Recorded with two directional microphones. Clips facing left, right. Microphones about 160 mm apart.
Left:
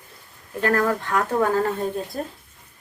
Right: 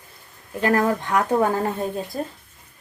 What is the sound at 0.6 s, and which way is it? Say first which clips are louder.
Speech: right 1 dB; 20° right (ahead or behind).